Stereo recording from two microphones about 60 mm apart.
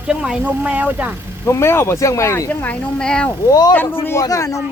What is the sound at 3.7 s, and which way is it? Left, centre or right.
Speech, left.